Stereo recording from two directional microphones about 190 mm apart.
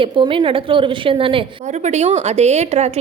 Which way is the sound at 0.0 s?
25° right (ahead or behind).